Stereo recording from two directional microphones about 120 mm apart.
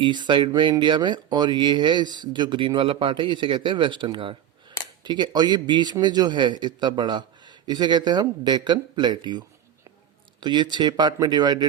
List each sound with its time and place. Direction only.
0.0 s a man's voice: 40° right (ahead or behind)
10.4 s a man's voice: 40° right (ahead or behind)